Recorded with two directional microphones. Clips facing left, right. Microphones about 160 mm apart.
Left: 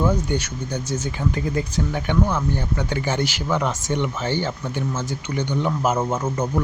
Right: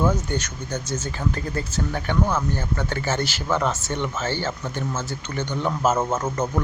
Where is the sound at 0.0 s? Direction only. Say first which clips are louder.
Left 1 dB; 15° left (ahead or behind).